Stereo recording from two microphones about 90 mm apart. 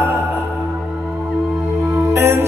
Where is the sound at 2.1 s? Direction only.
30° right (ahead or behind).